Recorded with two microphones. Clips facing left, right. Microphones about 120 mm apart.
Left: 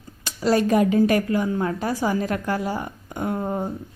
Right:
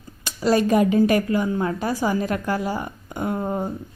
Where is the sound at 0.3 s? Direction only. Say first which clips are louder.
Right 1 dB; 15° right (ahead or behind).